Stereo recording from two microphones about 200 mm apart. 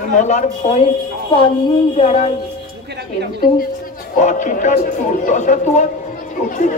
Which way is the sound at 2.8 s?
55° right (ahead or behind).